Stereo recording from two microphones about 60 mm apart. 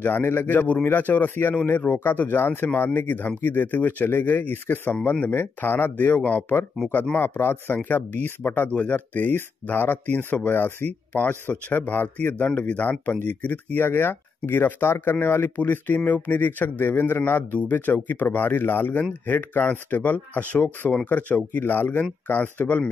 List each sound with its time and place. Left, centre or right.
0.0 s speech: left